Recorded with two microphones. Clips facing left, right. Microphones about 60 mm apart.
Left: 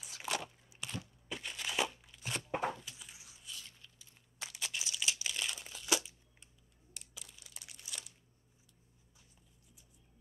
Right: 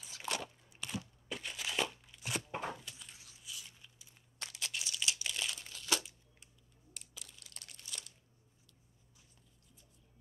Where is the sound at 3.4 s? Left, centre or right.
Centre.